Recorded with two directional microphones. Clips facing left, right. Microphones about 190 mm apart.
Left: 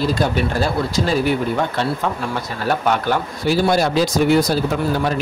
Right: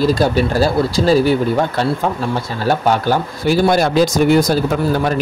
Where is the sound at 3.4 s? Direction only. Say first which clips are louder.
Right 3 dB; 50° right (ahead or behind).